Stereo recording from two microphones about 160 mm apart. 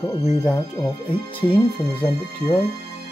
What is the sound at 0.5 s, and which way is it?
Speech, 25° left (ahead or behind).